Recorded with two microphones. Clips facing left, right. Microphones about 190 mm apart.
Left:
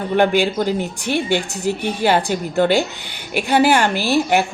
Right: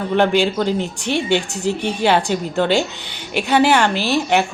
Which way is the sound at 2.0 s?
5° left (ahead or behind).